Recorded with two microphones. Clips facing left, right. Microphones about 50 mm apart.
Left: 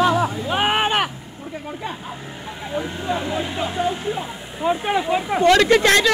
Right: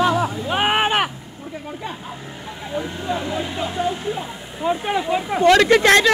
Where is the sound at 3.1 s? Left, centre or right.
Left.